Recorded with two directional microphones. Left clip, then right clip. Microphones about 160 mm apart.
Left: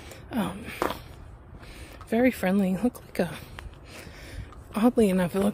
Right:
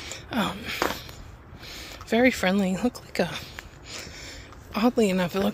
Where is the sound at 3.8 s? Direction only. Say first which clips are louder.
Right 5 dB; 35° left (ahead or behind).